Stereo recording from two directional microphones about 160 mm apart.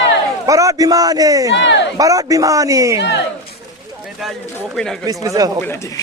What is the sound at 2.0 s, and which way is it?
A man's voice, 20° right (ahead or behind).